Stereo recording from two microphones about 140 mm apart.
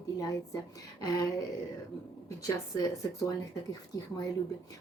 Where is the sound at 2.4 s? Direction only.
25° left (ahead or behind).